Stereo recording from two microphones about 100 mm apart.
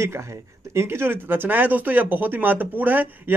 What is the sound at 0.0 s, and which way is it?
Speech, 30° right (ahead or behind).